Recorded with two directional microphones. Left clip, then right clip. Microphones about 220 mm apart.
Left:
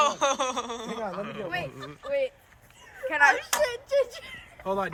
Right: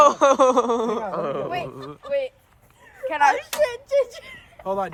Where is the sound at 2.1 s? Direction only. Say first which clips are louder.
Right 3 dB; 40° right (ahead or behind).